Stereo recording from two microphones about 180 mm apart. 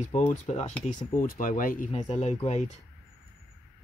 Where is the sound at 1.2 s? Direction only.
50° left (ahead or behind).